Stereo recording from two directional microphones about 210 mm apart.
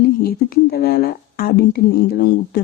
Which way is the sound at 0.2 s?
50° left (ahead or behind).